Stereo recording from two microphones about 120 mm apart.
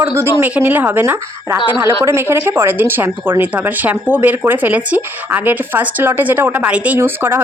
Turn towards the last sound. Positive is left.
turn(degrees=-20)  # may be behind; listen again after turning